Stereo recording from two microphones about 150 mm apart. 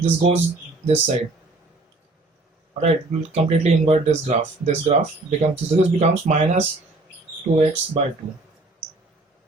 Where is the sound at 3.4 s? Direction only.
45° right (ahead or behind).